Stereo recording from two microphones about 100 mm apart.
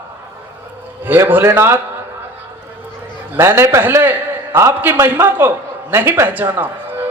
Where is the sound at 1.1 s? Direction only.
20° right (ahead or behind).